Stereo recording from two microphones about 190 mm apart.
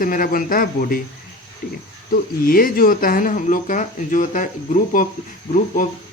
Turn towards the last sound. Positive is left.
turn(degrees=40)  # may be behind; listen again after turning